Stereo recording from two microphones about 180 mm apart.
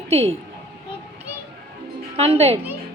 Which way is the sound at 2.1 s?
35° right (ahead or behind).